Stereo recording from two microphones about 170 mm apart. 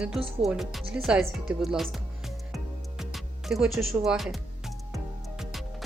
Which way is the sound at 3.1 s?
Centre (ahead or behind).